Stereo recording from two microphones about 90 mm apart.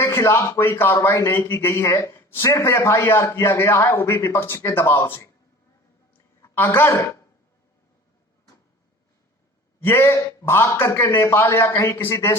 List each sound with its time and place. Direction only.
0.0 s a man's voice: 30° left (ahead or behind)
6.4 s a man's voice: 25° left (ahead or behind)
9.8 s a man's voice: 25° left (ahead or behind)